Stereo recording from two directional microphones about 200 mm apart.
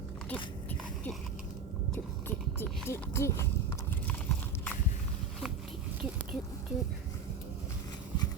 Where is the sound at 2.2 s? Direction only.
10° left (ahead or behind).